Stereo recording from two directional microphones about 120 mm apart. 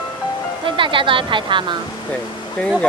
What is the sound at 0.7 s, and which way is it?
Speech, 45° right (ahead or behind).